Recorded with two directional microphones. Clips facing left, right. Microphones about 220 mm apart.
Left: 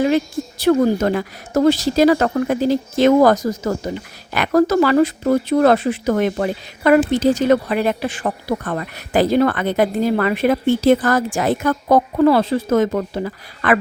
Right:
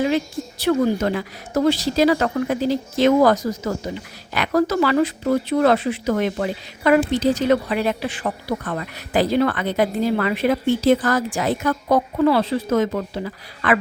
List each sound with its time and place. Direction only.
0.6 s speech: 45° left (ahead or behind)